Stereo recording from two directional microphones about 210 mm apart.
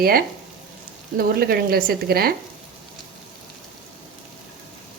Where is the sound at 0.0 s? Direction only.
45° right (ahead or behind).